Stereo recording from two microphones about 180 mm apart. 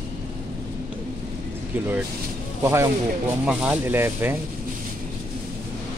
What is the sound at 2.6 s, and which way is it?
Speech, 15° right (ahead or behind).